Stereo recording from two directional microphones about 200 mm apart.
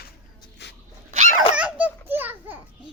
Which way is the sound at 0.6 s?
60° left (ahead or behind).